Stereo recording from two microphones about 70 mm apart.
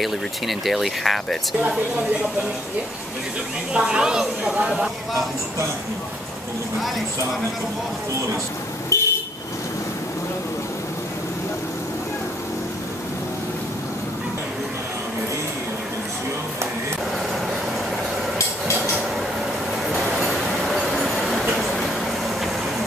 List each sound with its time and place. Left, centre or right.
0.0 s speech: centre
3.7 s a woman's voice: centre
8.9 s vehicle: left
20.2 s train: centre